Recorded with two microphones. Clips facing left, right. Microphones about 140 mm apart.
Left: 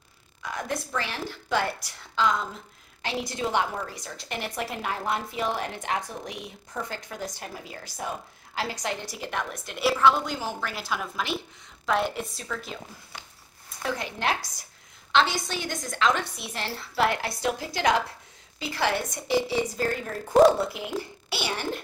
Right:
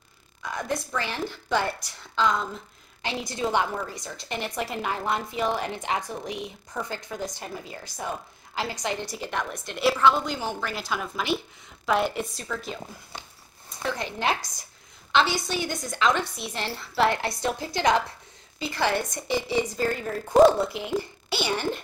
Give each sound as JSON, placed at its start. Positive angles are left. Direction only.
{"t": 0.4, "sound": "a woman's voice", "side_deg": 0}
{"t": 13.1, "sound": "a sound", "side_deg": -20}
{"t": 13.8, "sound": "a woman's voice", "side_deg": 5}